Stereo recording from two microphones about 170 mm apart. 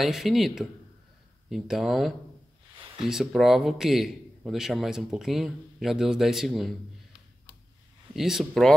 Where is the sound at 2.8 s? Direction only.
30° right (ahead or behind).